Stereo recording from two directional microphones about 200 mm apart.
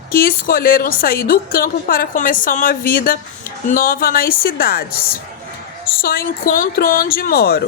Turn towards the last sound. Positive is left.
turn(degrees=50)  # may be behind; listen again after turning